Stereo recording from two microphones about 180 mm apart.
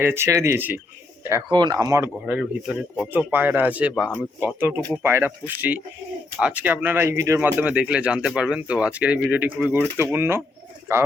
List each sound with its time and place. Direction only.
0.0 s speech: 15° right (ahead or behind)
1.3 s speech: 25° right (ahead or behind)